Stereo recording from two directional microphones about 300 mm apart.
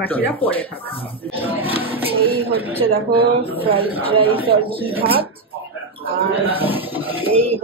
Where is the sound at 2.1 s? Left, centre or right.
Centre.